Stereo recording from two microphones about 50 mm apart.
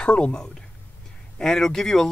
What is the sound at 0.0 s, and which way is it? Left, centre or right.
Speech, left.